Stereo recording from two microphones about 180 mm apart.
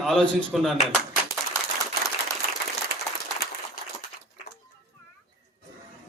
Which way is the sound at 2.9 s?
65° right (ahead or behind).